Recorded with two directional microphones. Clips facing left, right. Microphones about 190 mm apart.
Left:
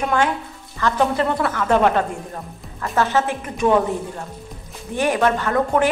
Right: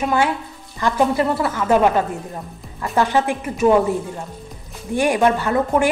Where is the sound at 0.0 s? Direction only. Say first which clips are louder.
Right 1 dB; 10° right (ahead or behind).